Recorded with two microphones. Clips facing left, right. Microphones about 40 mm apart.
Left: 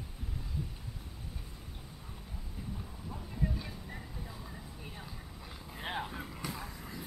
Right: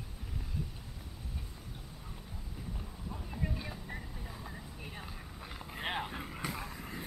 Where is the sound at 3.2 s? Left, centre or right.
Centre.